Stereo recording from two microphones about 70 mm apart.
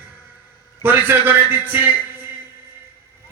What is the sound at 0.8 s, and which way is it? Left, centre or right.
A man's voice, right.